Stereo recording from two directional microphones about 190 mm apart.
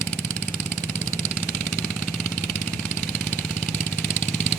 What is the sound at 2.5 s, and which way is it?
Vehicle, 35° left (ahead or behind).